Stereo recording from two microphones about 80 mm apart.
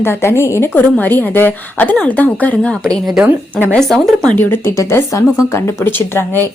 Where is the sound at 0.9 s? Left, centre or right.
Left.